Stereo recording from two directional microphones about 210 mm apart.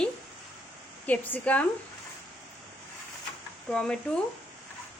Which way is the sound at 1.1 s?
10° left (ahead or behind).